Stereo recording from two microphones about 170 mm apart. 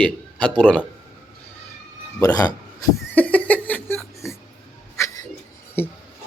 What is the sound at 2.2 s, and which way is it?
Speech, 20° left (ahead or behind).